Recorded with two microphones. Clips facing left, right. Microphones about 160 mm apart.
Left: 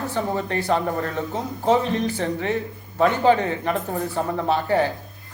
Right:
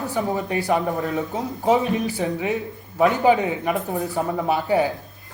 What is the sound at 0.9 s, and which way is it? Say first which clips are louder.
Speech: right 1 dB; centre (ahead or behind).